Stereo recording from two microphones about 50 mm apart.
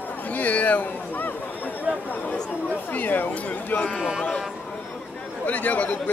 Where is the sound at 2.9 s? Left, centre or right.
Left.